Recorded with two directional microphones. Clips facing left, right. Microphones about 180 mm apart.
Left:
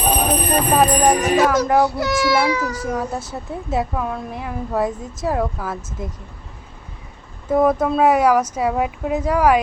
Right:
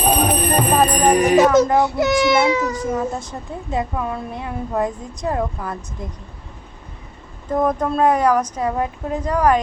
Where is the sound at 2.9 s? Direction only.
Centre (ahead or behind).